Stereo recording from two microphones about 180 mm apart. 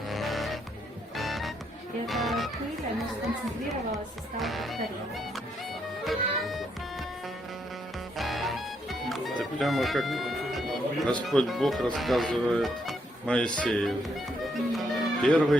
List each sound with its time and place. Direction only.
0.1 s music: centre (ahead or behind)
4.4 s speech: centre (ahead or behind)
6.1 s music: centre (ahead or behind)
8.2 s speech: centre (ahead or behind)